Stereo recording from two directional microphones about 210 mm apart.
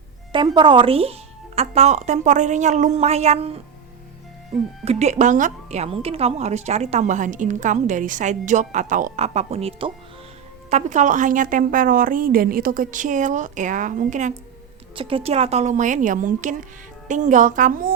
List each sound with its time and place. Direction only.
0.3 s speech: 20° right (ahead or behind)
4.9 s speech: 35° right (ahead or behind)
14.9 s speech: 25° right (ahead or behind)